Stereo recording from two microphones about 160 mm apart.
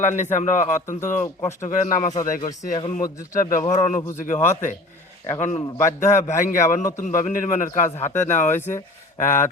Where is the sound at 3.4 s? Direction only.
50° left (ahead or behind).